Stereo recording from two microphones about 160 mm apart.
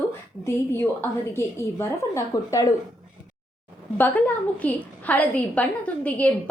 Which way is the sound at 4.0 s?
10° left (ahead or behind).